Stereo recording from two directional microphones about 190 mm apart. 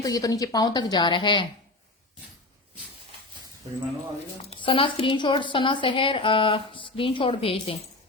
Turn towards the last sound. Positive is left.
turn(degrees=30)  # may be behind; listen again after turning